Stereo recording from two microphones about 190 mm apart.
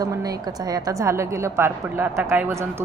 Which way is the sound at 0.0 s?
20° right (ahead or behind).